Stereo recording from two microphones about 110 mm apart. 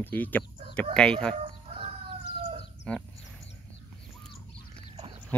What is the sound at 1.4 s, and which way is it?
Chicken, 60° right (ahead or behind).